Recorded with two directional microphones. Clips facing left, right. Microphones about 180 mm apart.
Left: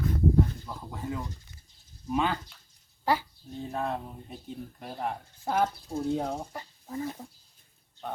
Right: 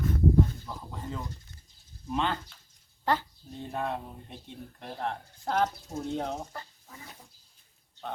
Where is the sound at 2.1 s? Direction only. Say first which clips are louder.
Left 2 dB; 5° left (ahead or behind).